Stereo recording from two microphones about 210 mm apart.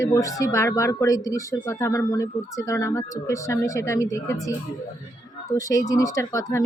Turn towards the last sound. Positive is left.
turn(degrees=15)  # may be behind; listen again after turning